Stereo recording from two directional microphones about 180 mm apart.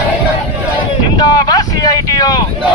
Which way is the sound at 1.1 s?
20° left (ahead or behind).